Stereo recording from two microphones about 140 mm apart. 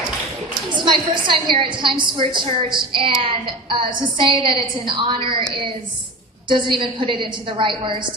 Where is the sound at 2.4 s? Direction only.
40° right (ahead or behind).